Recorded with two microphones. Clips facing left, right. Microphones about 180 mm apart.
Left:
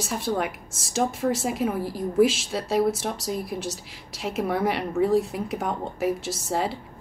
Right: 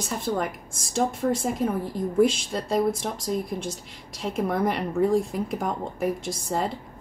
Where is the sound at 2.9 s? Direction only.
80° left.